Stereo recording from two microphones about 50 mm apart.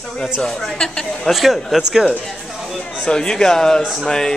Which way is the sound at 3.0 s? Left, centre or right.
Centre.